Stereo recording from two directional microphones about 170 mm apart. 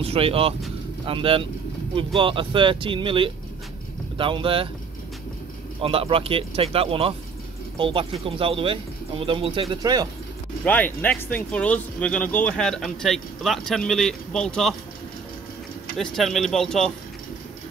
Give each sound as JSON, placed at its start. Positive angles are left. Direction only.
{"t": 0.0, "sound": "speech", "side_deg": -35}
{"t": 5.8, "sound": "speech", "side_deg": -35}
{"t": 10.6, "sound": "speech", "side_deg": 10}
{"t": 16.0, "sound": "speech", "side_deg": 0}